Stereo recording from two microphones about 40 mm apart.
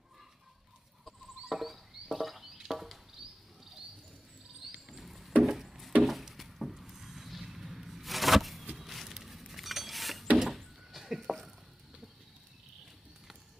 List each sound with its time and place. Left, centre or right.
1.0 s a sound: centre
4.8 s music: centre
5.4 s wood: centre
6.0 s a sound: centre
8.7 s power windows: centre
10.3 s door: centre